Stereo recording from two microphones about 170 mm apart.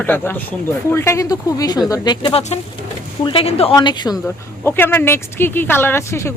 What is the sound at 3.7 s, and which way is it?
Speech, 25° left (ahead or behind).